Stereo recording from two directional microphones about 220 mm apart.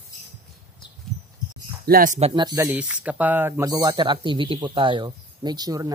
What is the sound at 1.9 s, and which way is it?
Speech, 40° right (ahead or behind).